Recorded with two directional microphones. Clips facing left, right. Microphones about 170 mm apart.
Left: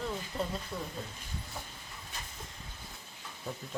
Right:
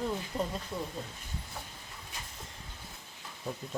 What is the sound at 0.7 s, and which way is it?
Speech, 10° right (ahead or behind).